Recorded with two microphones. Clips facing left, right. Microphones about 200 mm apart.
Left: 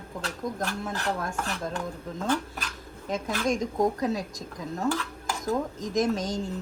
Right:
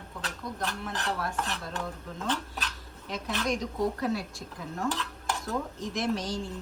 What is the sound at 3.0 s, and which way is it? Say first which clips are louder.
A woman's voice: left 4 dB; 50° left (ahead or behind).